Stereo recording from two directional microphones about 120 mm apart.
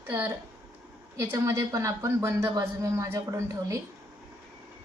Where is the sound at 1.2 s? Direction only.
20° right (ahead or behind).